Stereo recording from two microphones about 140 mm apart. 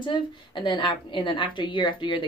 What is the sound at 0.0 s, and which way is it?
A woman's voice, 35° left (ahead or behind).